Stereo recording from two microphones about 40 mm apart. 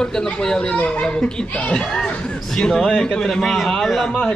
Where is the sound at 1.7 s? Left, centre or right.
Centre.